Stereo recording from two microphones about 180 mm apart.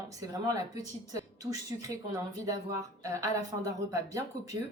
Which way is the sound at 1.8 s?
20° right (ahead or behind).